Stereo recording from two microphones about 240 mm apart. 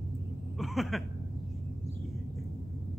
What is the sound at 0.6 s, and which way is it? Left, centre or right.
Cough, centre.